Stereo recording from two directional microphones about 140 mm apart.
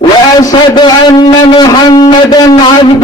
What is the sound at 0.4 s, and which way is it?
A man's voice, 30° left (ahead or behind).